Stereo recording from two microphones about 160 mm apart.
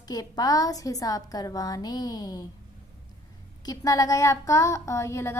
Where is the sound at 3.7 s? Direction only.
20° left (ahead or behind).